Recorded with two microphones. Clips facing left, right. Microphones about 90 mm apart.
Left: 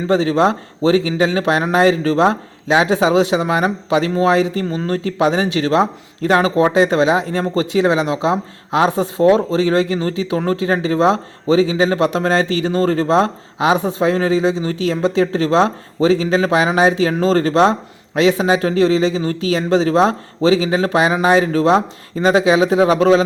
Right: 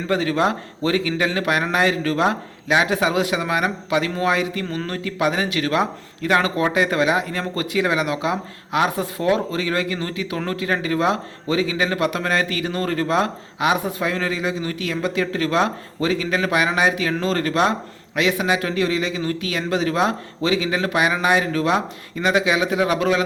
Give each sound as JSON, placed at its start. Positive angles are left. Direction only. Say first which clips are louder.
{"t": 0.1, "sound": "speech", "louder": "left 5 dB", "side_deg": 25}